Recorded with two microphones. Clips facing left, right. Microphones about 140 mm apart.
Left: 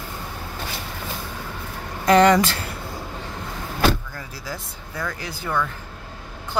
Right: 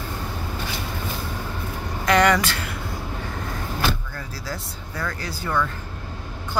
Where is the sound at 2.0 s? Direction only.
30° left (ahead or behind).